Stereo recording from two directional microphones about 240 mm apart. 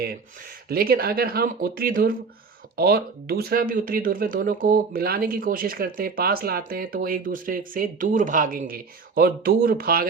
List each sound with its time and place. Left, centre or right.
0.7 s speech: right